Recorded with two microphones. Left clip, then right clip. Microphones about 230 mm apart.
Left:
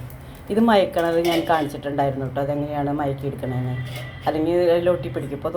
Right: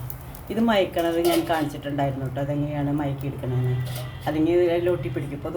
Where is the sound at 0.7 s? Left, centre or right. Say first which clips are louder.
Left 3 dB; centre.